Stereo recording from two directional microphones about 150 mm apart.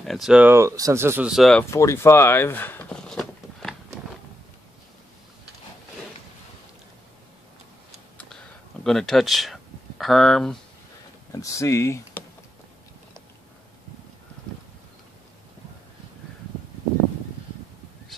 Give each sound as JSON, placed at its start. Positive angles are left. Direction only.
{"t": 0.0, "sound": "speech", "side_deg": 0}
{"t": 1.3, "sound": "speech", "side_deg": 0}
{"t": 1.6, "sound": "speech", "side_deg": 20}
{"t": 8.8, "sound": "speech", "side_deg": 5}
{"t": 11.3, "sound": "speech", "side_deg": 20}